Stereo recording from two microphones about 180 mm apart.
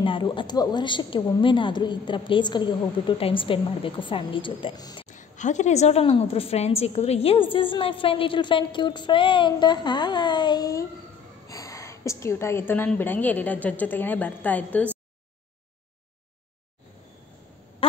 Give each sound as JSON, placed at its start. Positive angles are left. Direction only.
{"t": 0.0, "sound": "a woman's voice", "side_deg": 30}
{"t": 5.0, "sound": "a woman's voice", "side_deg": 45}